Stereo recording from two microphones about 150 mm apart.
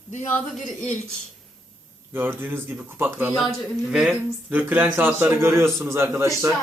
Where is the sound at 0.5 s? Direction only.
5° left (ahead or behind).